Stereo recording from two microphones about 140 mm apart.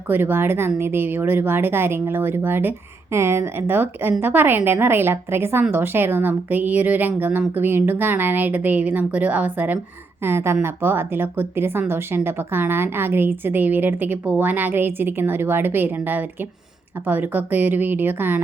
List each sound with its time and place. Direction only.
0.1 s a woman's voice: 15° right (ahead or behind)